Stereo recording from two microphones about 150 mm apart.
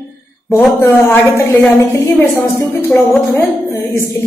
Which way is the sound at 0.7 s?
15° left (ahead or behind).